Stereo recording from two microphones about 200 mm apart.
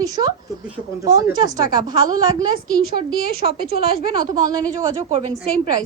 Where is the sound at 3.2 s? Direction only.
50° left (ahead or behind).